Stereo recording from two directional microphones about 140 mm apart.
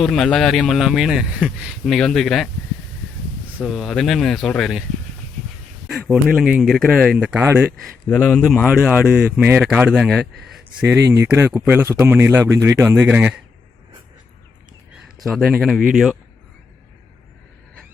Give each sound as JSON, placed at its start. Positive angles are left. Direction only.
{"t": 0.0, "sound": "speech", "side_deg": 5}
{"t": 3.6, "sound": "speech", "side_deg": 0}
{"t": 6.2, "sound": "speech", "side_deg": -5}
{"t": 7.8, "sound": "a man's voice", "side_deg": 10}
{"t": 8.6, "sound": "speech", "side_deg": -5}
{"t": 14.9, "sound": "speech", "side_deg": 0}